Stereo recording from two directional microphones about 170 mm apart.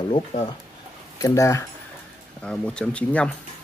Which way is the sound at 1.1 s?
20° left (ahead or behind).